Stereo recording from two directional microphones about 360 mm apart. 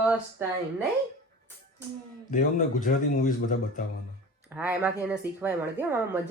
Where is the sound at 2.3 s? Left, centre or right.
Left.